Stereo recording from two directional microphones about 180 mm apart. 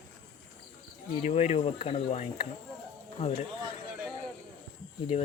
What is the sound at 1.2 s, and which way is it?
Speech, 40° left (ahead or behind).